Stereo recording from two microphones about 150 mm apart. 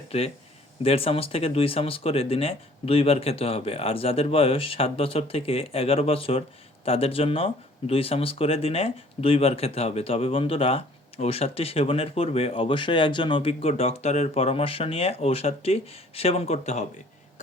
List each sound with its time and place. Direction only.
0.1 s speech: 45° left (ahead or behind)